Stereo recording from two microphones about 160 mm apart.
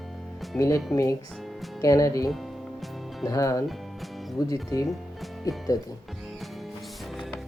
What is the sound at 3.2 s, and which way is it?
Speech, 20° left (ahead or behind).